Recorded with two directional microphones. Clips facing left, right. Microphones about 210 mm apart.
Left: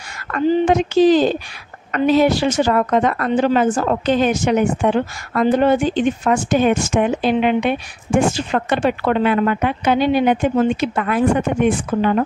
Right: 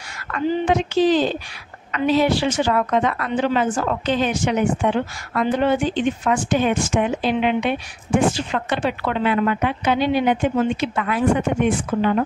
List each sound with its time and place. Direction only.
0.3 s a woman's voice: 45° left (ahead or behind)